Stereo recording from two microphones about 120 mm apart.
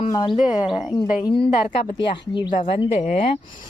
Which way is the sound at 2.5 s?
55° left (ahead or behind).